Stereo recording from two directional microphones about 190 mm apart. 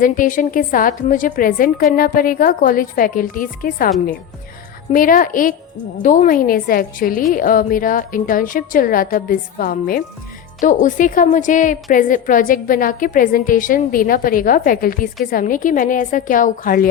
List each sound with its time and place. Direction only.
0.0 s a woman's voice: 45° left (ahead or behind)